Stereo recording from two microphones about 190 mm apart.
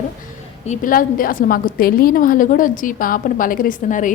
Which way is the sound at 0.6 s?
40° left (ahead or behind).